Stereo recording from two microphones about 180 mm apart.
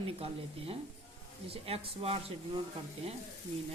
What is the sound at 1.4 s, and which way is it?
Speech, 30° right (ahead or behind).